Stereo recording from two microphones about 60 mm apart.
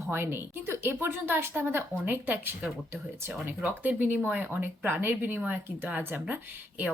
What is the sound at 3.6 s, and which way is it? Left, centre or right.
A woman's voice, right.